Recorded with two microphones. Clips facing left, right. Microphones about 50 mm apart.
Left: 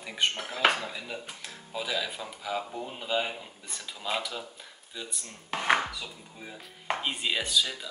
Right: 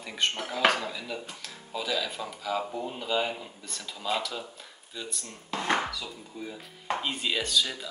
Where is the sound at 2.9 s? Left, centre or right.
Centre.